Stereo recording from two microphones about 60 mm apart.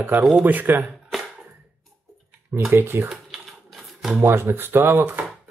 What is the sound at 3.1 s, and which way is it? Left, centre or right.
Typewriter, centre.